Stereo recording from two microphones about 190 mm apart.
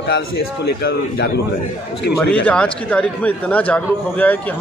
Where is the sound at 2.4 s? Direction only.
5° left (ahead or behind).